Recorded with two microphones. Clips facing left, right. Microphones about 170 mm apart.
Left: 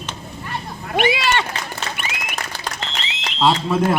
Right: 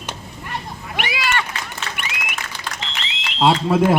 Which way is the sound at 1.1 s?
30° left (ahead or behind).